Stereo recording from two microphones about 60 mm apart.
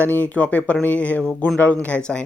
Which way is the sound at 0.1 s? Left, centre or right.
Left.